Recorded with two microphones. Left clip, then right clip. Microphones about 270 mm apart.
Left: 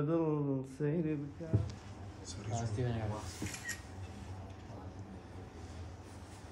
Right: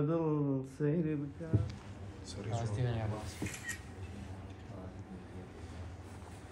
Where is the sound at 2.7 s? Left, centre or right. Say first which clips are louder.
Even; left.